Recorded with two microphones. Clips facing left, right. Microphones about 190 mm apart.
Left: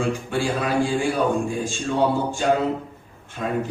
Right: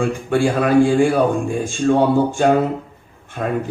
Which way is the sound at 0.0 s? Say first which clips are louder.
Right 6 dB; 55° right (ahead or behind).